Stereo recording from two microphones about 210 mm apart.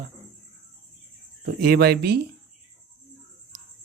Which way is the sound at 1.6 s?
45° right (ahead or behind).